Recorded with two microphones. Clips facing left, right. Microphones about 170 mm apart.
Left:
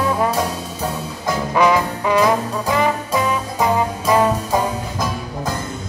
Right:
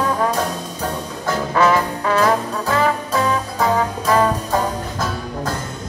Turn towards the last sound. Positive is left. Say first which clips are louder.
# left 1 dB
turn(degrees=10)  # may be behind; listen again after turning